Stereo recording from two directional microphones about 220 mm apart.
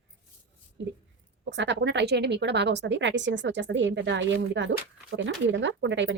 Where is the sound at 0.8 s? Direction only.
55° right (ahead or behind).